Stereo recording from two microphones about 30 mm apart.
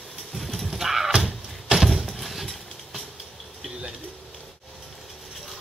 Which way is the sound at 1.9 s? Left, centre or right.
Centre.